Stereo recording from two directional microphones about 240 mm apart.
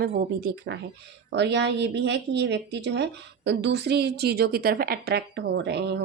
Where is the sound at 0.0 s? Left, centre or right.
Right.